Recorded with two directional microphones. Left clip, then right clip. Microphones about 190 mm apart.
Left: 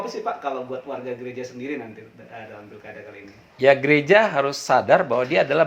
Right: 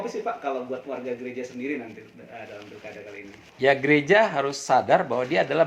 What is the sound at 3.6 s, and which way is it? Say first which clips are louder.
Speech: left 4 dB; 35° left (ahead or behind).